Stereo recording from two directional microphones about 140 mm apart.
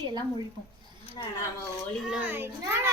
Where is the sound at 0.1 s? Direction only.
30° right (ahead or behind).